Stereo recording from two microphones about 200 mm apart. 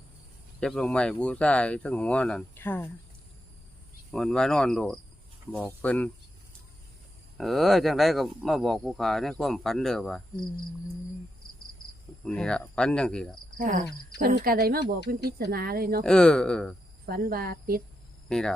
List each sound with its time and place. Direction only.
0.6 s speech: 5° left (ahead or behind)
4.1 s speech: 5° left (ahead or behind)
7.3 s speech: centre (ahead or behind)
12.2 s speech: 5° left (ahead or behind)
13.6 s cricket: 40° right (ahead or behind)
14.2 s speech: 50° right (ahead or behind)
16.0 s speech: 5° left (ahead or behind)
17.1 s speech: 50° right (ahead or behind)
18.3 s hum: 5° left (ahead or behind)